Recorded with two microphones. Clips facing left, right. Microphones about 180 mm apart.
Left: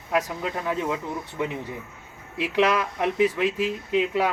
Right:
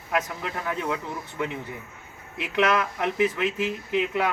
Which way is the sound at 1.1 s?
Centre (ahead or behind).